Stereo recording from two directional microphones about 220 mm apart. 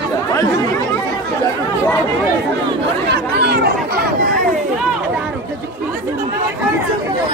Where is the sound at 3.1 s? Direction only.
45° right (ahead or behind).